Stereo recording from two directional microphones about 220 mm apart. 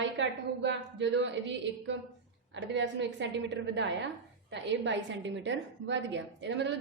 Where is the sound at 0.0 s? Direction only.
55° right (ahead or behind).